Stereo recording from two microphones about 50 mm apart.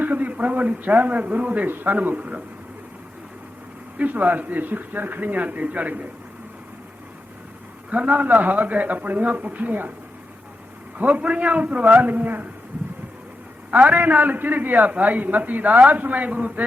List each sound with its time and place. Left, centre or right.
0.0 s a man's voice: right
3.9 s a man's voice: right
7.9 s a man's voice: right
10.9 s a man's voice: right
13.7 s a man's voice: right